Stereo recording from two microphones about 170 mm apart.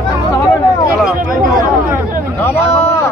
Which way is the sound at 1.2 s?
55° right (ahead or behind).